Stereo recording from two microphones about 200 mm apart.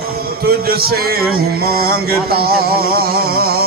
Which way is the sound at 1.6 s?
50° right (ahead or behind).